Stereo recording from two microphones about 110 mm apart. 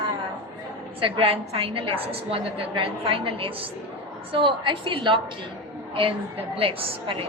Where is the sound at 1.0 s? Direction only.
55° right (ahead or behind).